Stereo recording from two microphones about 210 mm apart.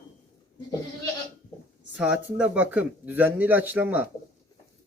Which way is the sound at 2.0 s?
5° right (ahead or behind).